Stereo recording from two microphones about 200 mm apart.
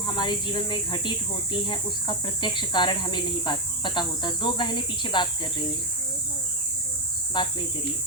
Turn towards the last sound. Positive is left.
turn(degrees=25)  # may be behind; listen again after turning